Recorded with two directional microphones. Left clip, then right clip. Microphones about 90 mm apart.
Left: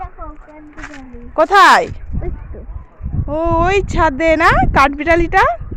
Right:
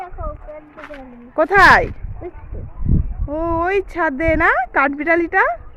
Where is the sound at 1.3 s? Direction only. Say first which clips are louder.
Left 2 dB; 15° right (ahead or behind).